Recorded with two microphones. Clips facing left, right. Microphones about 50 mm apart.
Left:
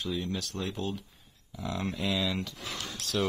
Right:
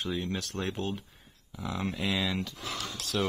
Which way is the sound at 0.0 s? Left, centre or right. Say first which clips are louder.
Even; right.